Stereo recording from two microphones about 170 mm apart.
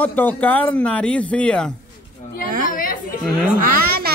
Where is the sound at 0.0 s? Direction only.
10° left (ahead or behind).